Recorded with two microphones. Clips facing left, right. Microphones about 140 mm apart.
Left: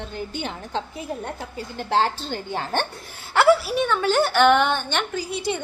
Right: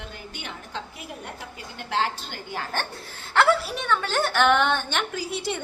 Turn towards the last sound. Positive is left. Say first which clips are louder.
# left 3 dB
turn(degrees=0)  # may be behind; listen again after turning